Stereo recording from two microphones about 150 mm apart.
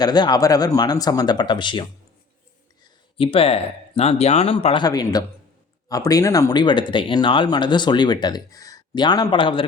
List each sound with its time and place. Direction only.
0.0 s speech: 25° left (ahead or behind)
3.2 s speech: 40° left (ahead or behind)